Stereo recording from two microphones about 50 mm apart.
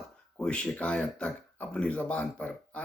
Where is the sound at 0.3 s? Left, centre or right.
Centre.